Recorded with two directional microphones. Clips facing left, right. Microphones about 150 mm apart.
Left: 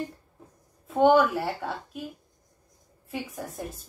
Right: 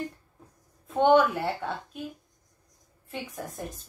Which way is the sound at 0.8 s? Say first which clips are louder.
Left 1 dB; 5° left (ahead or behind).